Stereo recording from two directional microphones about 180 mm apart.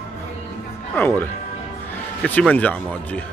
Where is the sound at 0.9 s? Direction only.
10° left (ahead or behind).